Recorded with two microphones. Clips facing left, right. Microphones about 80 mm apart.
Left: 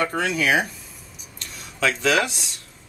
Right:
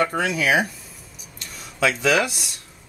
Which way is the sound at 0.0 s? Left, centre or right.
Centre.